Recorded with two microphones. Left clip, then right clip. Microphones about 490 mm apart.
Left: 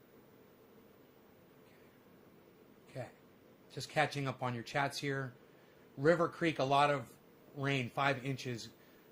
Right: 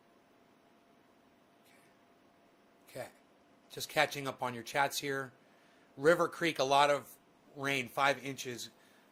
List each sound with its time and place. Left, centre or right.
2.9 s speech: centre